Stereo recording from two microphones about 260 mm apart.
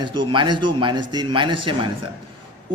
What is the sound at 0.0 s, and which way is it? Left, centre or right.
A man's voice, centre.